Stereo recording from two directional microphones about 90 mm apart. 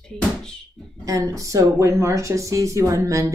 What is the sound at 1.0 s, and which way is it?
Speech, 35° right (ahead or behind).